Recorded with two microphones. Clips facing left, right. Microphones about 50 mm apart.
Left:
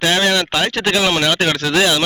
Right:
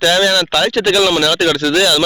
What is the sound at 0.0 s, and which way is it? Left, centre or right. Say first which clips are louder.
Speech: right 3 dB; left.